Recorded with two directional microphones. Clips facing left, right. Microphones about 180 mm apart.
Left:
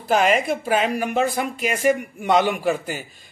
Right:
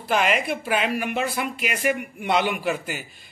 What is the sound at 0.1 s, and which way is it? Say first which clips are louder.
Speech: left 4 dB; 40° left (ahead or behind).